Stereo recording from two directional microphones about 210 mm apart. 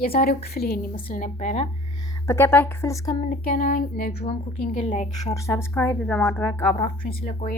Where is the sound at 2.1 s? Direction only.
15° left (ahead or behind).